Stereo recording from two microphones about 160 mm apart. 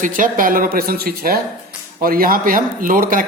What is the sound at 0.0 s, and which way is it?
A man's voice, 55° right (ahead or behind).